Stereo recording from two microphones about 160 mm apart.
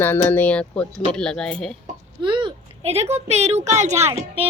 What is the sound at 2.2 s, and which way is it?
A woman's voice, 30° right (ahead or behind).